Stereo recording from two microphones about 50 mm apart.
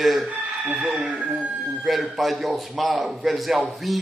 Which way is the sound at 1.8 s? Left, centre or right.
Centre.